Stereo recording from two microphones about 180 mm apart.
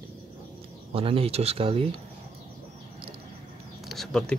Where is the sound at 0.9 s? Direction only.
30° right (ahead or behind).